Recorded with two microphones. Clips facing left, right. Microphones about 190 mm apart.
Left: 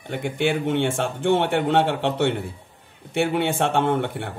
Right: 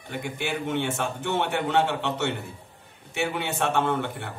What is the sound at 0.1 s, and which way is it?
Speech, 55° left (ahead or behind).